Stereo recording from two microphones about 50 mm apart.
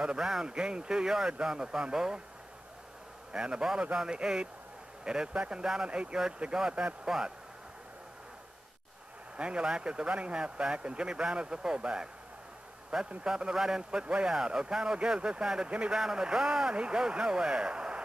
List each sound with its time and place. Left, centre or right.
0.0 s a man's voice: centre
3.3 s a man's voice: centre
7.1 s a man's voice: centre
9.4 s speech: centre
13.2 s a man's voice: centre